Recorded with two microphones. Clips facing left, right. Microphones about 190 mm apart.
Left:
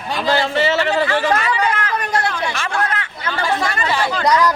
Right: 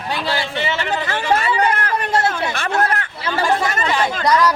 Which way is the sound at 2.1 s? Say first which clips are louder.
Right 3 dB; 25° right (ahead or behind).